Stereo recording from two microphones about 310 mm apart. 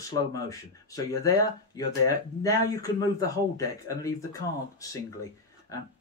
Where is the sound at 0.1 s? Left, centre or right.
Centre.